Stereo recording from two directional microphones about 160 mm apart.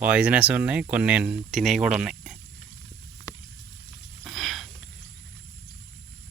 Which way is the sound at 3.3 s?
25° left (ahead or behind).